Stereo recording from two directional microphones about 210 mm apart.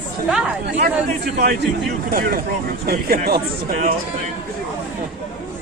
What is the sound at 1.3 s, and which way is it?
Speech, 40° right (ahead or behind).